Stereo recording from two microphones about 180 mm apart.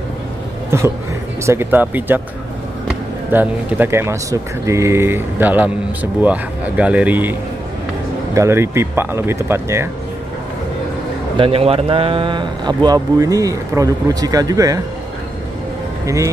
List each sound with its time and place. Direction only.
0.7 s speech: 15° right (ahead or behind)
3.3 s speech: 10° right (ahead or behind)
8.4 s speech: 15° right (ahead or behind)
11.3 s speech: 30° right (ahead or behind)